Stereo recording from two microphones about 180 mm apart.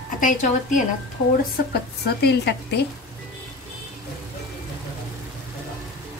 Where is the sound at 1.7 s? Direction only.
65° left (ahead or behind).